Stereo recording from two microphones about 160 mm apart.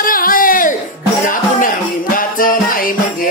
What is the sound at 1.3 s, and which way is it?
Music, 60° left (ahead or behind).